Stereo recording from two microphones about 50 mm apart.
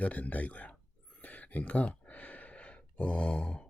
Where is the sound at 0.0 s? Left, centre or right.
Left.